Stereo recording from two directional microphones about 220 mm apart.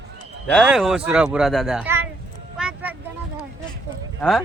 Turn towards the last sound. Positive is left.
turn(degrees=0)  # may be behind; listen again after turning